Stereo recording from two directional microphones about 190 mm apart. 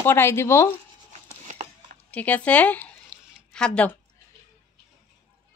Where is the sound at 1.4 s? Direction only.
35° right (ahead or behind).